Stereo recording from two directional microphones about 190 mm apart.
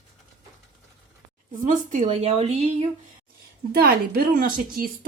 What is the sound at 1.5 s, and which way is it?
Speech, 40° right (ahead or behind).